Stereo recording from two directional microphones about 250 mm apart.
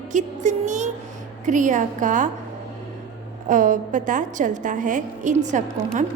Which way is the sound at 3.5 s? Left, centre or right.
Right.